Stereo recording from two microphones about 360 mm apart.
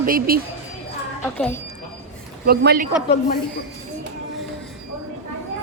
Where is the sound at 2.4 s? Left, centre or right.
Right.